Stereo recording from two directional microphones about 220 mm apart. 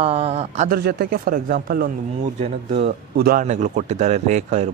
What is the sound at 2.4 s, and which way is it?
Speech, 30° right (ahead or behind).